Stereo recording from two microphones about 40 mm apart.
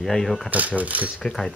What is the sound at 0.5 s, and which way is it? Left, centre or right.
Speech, right.